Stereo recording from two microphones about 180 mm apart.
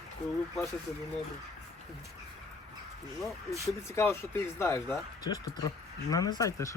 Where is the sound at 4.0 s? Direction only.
15° left (ahead or behind).